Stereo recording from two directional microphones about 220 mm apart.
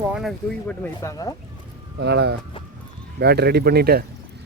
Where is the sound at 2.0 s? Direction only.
50° right (ahead or behind).